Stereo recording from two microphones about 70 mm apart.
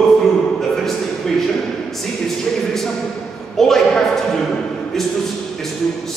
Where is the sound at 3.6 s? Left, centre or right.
Centre.